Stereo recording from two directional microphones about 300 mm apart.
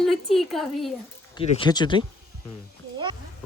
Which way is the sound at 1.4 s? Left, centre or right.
Centre.